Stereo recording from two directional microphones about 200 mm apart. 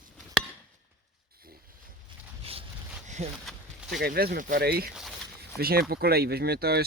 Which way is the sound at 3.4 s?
Centre (ahead or behind).